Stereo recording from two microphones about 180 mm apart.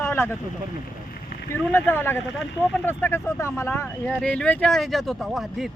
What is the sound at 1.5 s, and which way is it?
Speech, 10° left (ahead or behind).